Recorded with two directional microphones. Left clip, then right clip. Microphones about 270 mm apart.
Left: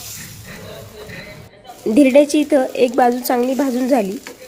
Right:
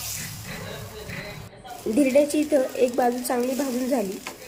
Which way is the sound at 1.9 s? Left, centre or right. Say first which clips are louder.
Left 8 dB; left.